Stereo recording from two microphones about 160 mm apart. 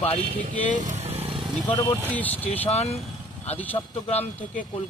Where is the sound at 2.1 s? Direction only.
10° left (ahead or behind).